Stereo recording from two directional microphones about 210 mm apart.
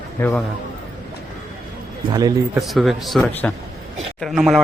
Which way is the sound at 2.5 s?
Centre (ahead or behind).